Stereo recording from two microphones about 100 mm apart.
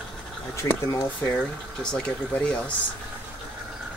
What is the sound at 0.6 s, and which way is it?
Speech, 30° left (ahead or behind).